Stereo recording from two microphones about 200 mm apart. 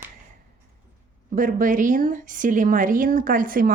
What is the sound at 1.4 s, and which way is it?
Speech, 45° right (ahead or behind).